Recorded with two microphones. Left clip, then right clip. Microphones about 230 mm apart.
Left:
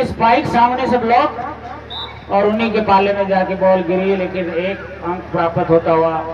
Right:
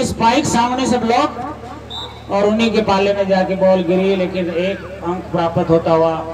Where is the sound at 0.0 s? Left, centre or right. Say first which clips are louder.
Left 1 dB; right.